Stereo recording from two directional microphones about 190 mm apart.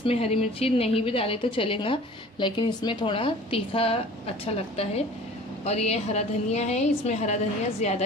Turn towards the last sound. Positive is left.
turn(degrees=35)  # may be behind; listen again after turning